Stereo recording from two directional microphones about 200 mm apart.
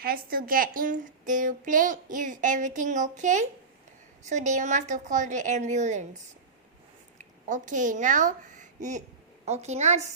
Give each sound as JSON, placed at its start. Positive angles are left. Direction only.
{"t": 0.0, "sound": "a woman's voice", "side_deg": -50}
{"t": 7.2, "sound": "a woman's voice", "side_deg": -40}